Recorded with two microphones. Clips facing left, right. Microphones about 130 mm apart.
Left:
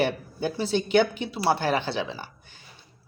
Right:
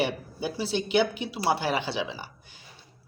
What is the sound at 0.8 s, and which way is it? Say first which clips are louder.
Speech: left 3 dB; 45° left (ahead or behind).